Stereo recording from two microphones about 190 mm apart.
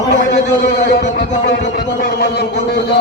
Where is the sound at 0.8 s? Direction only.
60° left (ahead or behind).